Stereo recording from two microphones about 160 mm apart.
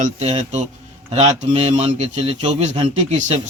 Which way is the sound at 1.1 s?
35° right (ahead or behind).